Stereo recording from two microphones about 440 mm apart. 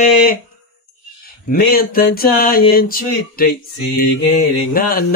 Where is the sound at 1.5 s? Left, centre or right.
Centre.